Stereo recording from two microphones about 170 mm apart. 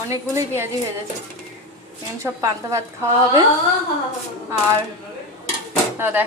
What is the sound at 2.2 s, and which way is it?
Speech, 15° right (ahead or behind).